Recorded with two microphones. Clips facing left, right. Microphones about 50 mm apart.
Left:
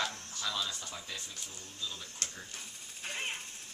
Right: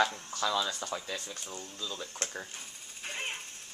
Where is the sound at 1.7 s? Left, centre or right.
Right.